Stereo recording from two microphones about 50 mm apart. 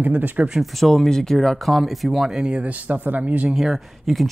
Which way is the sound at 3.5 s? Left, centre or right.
Centre.